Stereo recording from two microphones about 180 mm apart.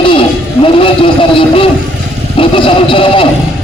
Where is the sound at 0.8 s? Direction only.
30° left (ahead or behind).